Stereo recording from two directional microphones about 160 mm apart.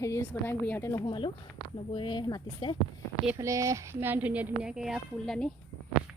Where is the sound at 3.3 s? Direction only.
20° right (ahead or behind); by 5.5 s 5° left (ahead or behind).